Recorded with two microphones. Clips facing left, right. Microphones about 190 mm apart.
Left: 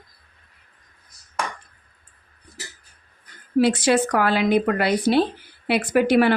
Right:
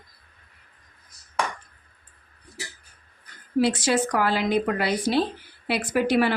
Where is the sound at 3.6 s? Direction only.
60° left (ahead or behind).